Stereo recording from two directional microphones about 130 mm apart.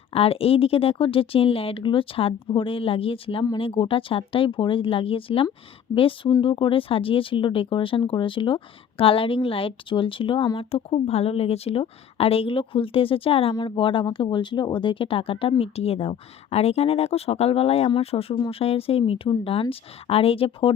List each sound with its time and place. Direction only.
0.1 s speech: 50° left (ahead or behind)